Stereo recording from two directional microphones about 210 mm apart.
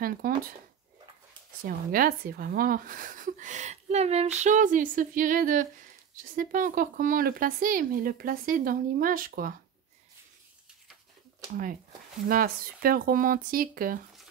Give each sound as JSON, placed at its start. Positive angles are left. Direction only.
{"t": 0.0, "sound": "speech", "side_deg": -45}
{"t": 1.9, "sound": "speech", "side_deg": -40}
{"t": 12.3, "sound": "speech", "side_deg": -45}